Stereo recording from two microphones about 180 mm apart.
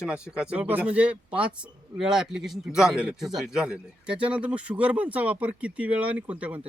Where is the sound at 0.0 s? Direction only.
5° right (ahead or behind).